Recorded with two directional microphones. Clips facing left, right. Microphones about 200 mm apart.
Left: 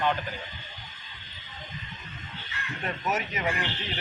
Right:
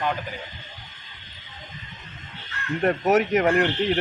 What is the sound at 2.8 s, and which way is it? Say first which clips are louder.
Speech: right 11 dB; 65° right (ahead or behind).